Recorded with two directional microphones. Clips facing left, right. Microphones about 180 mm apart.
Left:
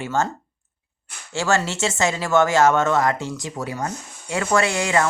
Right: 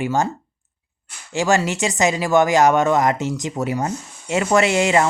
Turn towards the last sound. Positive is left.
turn(degrees=-20)  # may be behind; listen again after turning